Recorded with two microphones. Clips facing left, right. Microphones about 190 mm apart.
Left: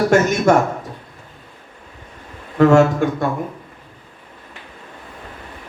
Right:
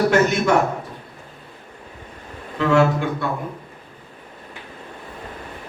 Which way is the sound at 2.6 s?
45° left (ahead or behind).